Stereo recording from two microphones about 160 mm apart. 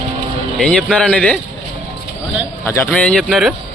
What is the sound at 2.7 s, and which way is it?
Speech, 10° left (ahead or behind).